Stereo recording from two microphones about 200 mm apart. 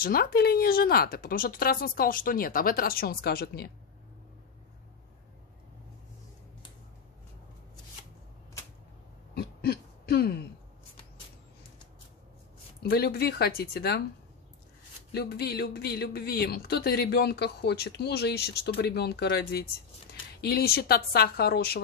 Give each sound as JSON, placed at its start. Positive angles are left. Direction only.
{"t": 0.0, "sound": "speech", "side_deg": 50}
{"t": 9.3, "sound": "throat clearing", "side_deg": 50}
{"t": 12.8, "sound": "speech", "side_deg": 50}
{"t": 15.1, "sound": "speech", "side_deg": 50}